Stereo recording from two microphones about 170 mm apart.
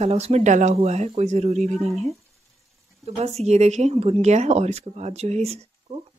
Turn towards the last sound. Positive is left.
turn(degrees=-40)  # may be behind; listen again after turning